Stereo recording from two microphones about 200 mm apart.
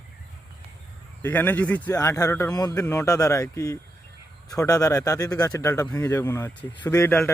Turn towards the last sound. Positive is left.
turn(degrees=10)  # may be behind; listen again after turning